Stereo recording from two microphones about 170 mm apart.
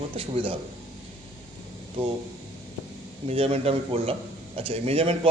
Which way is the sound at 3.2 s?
35° right (ahead or behind).